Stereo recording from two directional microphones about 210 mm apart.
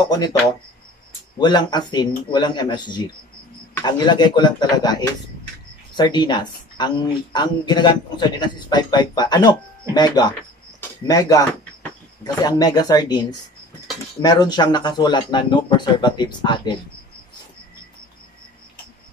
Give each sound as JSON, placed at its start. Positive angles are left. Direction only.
{"t": 0.0, "sound": "a man's voice", "side_deg": 20}
{"t": 1.4, "sound": "a man's voice", "side_deg": 20}
{"t": 5.9, "sound": "a man's voice", "side_deg": 20}